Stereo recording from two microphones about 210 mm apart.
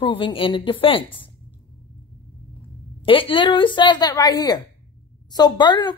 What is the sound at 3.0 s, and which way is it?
Speech, 25° left (ahead or behind).